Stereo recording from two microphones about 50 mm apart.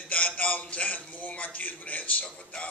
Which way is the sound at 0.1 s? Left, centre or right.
Left.